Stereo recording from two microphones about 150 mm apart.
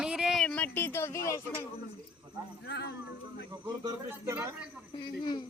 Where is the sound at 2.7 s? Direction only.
90° left.